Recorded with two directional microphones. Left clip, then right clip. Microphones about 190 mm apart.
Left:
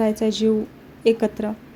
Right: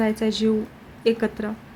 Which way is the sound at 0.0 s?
10° left (ahead or behind).